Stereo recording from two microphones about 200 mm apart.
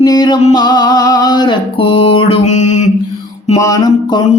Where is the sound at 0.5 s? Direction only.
20° left (ahead or behind); by 2.8 s 35° left (ahead or behind).